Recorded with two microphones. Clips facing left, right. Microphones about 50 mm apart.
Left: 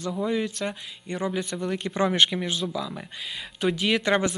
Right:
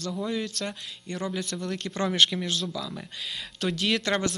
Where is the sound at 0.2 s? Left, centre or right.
Centre.